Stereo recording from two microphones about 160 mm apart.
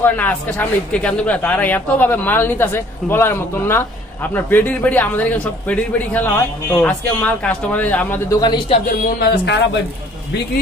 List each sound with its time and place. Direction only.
0.0 s speech: 10° left (ahead or behind)
8.4 s a man's voice: 25° left (ahead or behind)
9.0 s speech: 90° left